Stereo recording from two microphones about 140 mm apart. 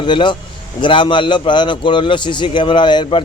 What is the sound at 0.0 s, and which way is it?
A man's voice, 35° left (ahead or behind).